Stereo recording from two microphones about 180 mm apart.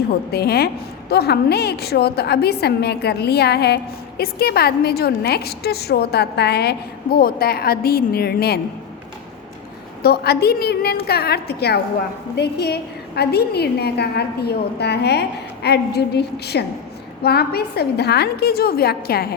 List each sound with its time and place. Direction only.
0.3 s a woman's voice: 60° left (ahead or behind)
10.0 s a woman's voice: 65° left (ahead or behind)